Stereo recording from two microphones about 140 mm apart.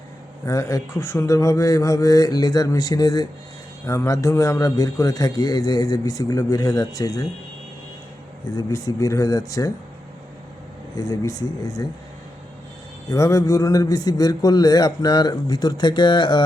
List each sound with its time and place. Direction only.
0.4 s a man's voice: 25° left (ahead or behind)
8.4 s a man's voice: 25° left (ahead or behind)
10.9 s a man's voice: 25° left (ahead or behind)
13.1 s a man's voice: 25° left (ahead or behind)